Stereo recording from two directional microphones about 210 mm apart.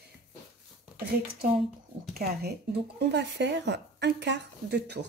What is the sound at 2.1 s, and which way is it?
A woman's voice, 50° right (ahead or behind).